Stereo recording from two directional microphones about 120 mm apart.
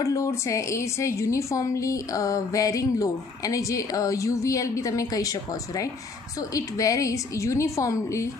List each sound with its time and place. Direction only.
0.0 s a woman's voice: 25° left (ahead or behind)